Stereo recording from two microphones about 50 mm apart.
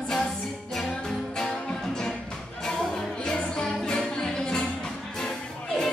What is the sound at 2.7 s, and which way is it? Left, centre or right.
Music, centre.